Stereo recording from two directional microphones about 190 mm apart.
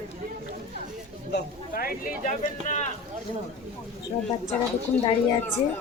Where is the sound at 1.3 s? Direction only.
50° left (ahead or behind).